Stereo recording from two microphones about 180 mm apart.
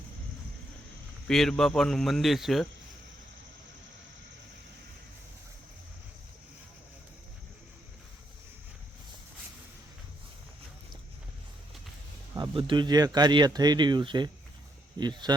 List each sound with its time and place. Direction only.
1.3 s speech: centre (ahead or behind)
12.3 s speech: 25° right (ahead or behind)